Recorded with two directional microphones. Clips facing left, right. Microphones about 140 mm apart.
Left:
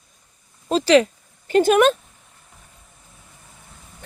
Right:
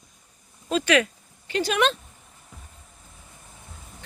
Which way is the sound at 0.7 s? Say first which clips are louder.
Left 6 dB; 35° left (ahead or behind).